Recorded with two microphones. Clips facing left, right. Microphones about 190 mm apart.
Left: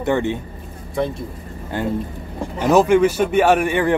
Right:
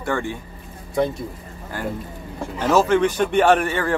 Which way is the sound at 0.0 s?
20° left (ahead or behind).